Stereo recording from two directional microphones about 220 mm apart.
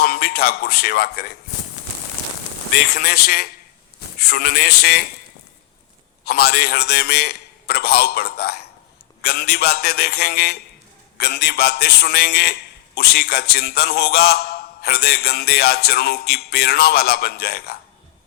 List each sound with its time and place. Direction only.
0.0 s a man's voice: 45° left (ahead or behind)
2.9 s a man's voice: 45° left (ahead or behind)
6.2 s a man's voice: 45° left (ahead or behind)